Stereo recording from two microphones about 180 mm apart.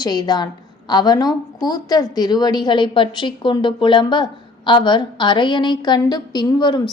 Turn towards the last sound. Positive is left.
turn(degrees=25)  # may be behind; listen again after turning